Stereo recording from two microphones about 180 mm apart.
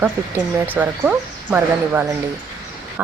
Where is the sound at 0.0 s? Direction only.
10° right (ahead or behind).